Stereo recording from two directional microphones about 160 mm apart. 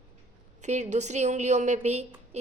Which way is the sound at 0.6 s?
45° right (ahead or behind).